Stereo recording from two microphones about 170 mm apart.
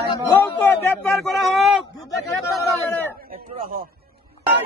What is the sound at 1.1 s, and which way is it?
Speech, centre (ahead or behind).